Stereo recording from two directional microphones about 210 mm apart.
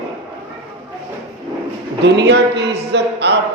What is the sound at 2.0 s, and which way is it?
Speech, 55° right (ahead or behind).